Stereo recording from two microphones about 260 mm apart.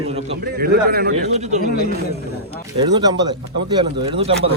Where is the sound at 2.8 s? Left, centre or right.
Centre.